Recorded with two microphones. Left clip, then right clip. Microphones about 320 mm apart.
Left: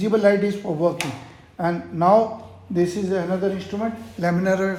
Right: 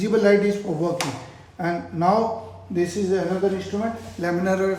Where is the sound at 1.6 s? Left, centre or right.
Centre.